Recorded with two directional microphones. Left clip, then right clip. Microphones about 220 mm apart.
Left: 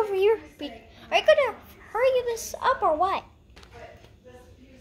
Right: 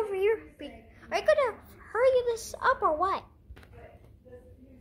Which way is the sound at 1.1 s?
10° right (ahead or behind).